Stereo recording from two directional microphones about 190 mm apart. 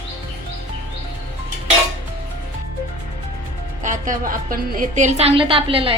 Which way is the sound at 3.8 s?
45° right (ahead or behind).